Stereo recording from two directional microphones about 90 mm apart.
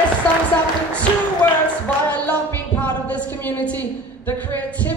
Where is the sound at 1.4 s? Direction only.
15° left (ahead or behind).